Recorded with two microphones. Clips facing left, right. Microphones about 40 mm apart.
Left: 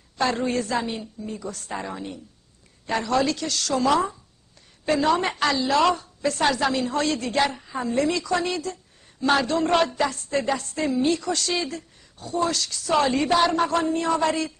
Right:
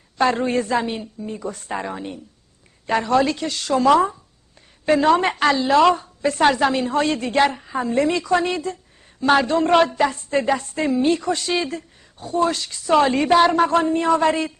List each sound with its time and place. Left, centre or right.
0.2 s a woman's voice: right
4.8 s a woman's voice: right
5.3 s a woman's voice: right
11.1 s a woman's voice: right